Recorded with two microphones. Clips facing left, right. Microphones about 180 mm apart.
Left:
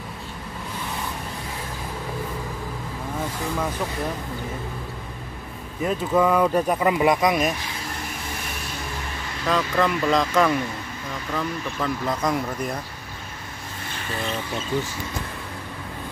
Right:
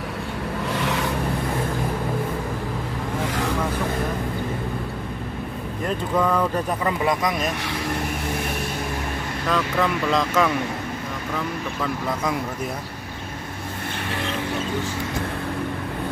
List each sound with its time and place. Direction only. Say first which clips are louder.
0.7 s vehicle: right 7 dB; 80° right
5.9 s speech: left 2 dB; 10° left (ahead or behind)
9.5 s speech: left 1 dB; centre (ahead or behind)